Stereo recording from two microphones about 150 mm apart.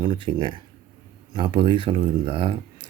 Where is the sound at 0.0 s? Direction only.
30° right (ahead or behind).